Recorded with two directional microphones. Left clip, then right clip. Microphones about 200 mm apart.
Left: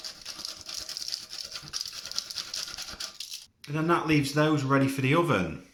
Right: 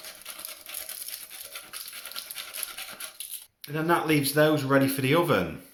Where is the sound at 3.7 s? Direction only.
5° right (ahead or behind).